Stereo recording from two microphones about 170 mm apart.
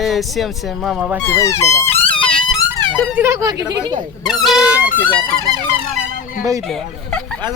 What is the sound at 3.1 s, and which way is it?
Speech, 15° right (ahead or behind).